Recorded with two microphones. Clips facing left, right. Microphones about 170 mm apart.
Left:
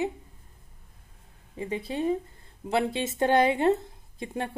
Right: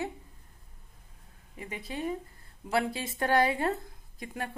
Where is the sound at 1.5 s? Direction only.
30° left (ahead or behind).